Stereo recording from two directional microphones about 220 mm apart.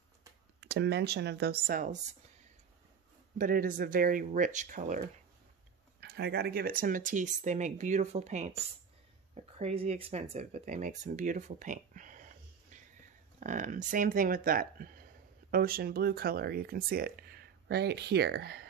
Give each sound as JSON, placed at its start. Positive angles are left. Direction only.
{"t": 0.6, "sound": "speech", "side_deg": -50}
{"t": 3.3, "sound": "speech", "side_deg": -40}
{"t": 5.9, "sound": "speech", "side_deg": -50}
{"t": 13.4, "sound": "speech", "side_deg": -35}